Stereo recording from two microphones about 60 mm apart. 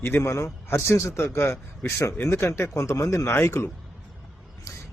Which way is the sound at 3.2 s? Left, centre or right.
Left.